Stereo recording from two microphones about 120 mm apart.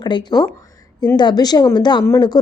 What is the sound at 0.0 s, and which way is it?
A woman's voice, 40° left (ahead or behind).